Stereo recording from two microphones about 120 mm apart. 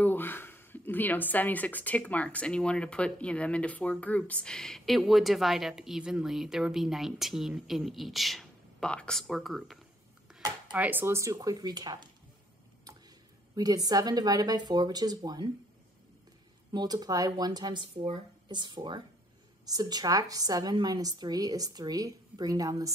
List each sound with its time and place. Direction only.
0.0 s speech: 15° left (ahead or behind); by 9.8 s centre (ahead or behind)
10.7 s speech: 15° right (ahead or behind)
11.3 s a woman's voice: 35° right (ahead or behind)
13.8 s a woman's voice: 35° right (ahead or behind)
16.7 s a woman's voice: 35° right (ahead or behind)